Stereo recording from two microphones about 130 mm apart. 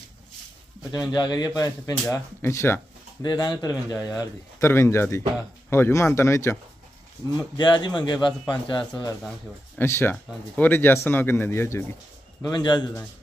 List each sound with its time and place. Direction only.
1.1 s a man's voice: 30° left (ahead or behind)
3.2 s a man's voice: 30° left (ahead or behind)
7.3 s speech: 35° left (ahead or behind)
9.8 s speech: 15° left (ahead or behind)
12.4 s speech: 30° left (ahead or behind)